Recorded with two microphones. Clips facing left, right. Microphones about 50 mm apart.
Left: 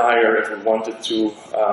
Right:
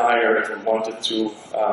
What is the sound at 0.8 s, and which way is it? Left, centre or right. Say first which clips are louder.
Speech: left 2 dB; left.